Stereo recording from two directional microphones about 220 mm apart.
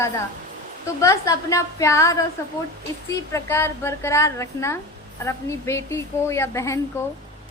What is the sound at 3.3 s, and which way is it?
A woman's voice, 10° left (ahead or behind).